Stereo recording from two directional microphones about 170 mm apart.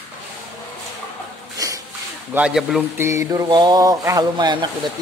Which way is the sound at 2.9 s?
15° right (ahead or behind).